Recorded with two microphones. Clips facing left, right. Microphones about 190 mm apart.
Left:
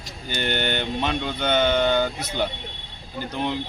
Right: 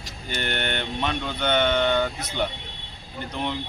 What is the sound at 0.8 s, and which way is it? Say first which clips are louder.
A man's voice: left 2 dB; 5° left (ahead or behind).